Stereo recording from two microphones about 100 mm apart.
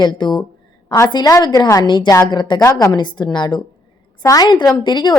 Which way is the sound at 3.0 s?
50° left (ahead or behind).